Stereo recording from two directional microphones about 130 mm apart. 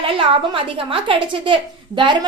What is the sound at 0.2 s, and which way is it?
A woman's voice, 40° right (ahead or behind).